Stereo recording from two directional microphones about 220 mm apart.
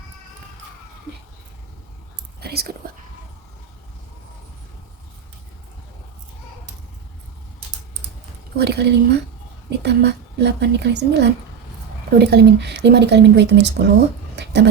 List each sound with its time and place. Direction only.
2.4 s whispering: 45° right (ahead or behind)
8.5 s speech: 50° right (ahead or behind)
14.3 s a sound: 50° right (ahead or behind)